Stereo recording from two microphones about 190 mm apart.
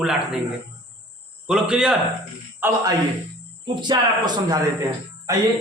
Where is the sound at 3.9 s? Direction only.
20° right (ahead or behind).